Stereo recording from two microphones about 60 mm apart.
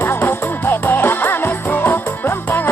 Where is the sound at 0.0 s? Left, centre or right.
Left.